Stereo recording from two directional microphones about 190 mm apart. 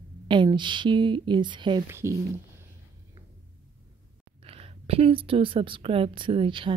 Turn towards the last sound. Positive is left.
turn(degrees=-25)  # may be behind; listen again after turning